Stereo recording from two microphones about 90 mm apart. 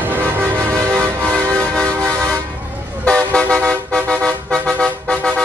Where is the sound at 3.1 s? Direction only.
10° left (ahead or behind).